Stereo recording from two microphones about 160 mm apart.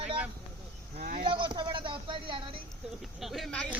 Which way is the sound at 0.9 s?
65° right (ahead or behind).